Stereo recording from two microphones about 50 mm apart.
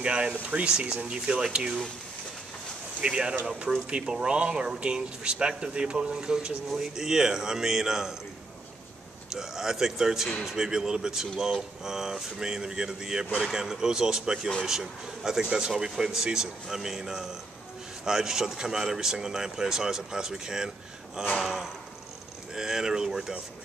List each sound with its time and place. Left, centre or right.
0.0 s speech: right
3.0 s speech: centre
9.3 s speech: centre
22.5 s speech: centre